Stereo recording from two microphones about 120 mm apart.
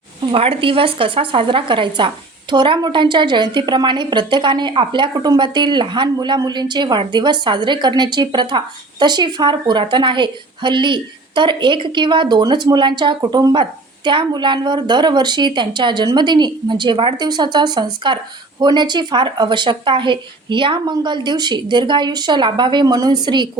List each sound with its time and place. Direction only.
0.2 s speech: 45° right (ahead or behind)